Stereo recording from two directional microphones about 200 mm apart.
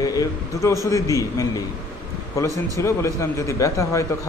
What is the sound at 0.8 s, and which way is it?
Speech, 15° left (ahead or behind).